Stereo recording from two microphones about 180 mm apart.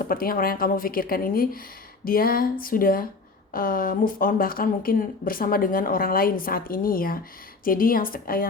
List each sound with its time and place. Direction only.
0.0 s speech: 55° left (ahead or behind)